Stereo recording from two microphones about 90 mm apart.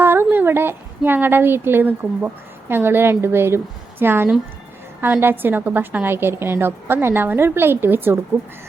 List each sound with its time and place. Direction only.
0.0 s a woman's voice: 25° right (ahead or behind)